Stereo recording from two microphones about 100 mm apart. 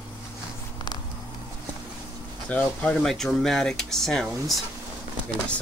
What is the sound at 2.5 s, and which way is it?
Speech, 10° left (ahead or behind).